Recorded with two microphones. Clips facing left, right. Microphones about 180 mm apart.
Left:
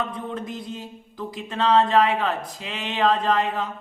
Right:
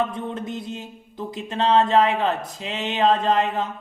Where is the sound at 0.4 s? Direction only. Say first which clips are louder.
Right 2 dB; 25° right (ahead or behind).